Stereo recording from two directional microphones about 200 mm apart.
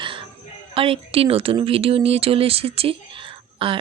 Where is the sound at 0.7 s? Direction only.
30° right (ahead or behind).